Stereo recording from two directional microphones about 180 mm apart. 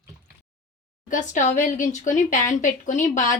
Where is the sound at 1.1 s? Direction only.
45° left (ahead or behind).